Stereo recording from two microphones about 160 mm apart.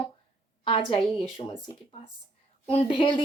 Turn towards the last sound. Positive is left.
turn(degrees=35)  # may be behind; listen again after turning